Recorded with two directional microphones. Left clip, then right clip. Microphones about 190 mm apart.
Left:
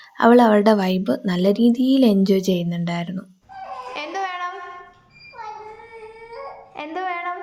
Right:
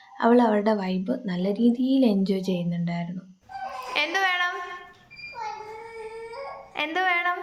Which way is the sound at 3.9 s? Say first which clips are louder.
Right 4 dB; 5° left (ahead or behind).